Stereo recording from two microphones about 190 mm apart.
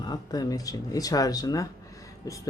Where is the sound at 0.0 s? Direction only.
20° left (ahead or behind).